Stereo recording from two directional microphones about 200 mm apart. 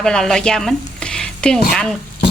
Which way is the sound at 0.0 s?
Centre (ahead or behind).